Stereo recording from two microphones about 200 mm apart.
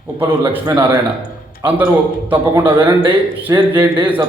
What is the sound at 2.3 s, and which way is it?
A man's voice, 10° right (ahead or behind).